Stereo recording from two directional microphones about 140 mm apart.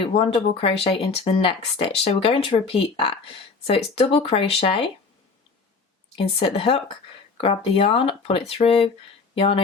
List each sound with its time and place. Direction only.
0.0 s speech: 40° left (ahead or behind)
6.1 s speech: 45° left (ahead or behind)